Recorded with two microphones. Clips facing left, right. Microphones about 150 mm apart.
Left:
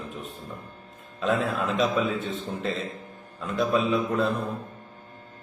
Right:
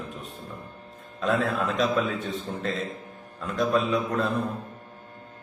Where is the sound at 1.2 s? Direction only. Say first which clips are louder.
Even; centre (ahead or behind).